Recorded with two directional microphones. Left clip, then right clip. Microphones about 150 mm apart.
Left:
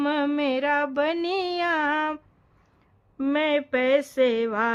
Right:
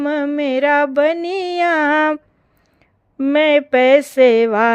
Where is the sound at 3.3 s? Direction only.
50° right (ahead or behind).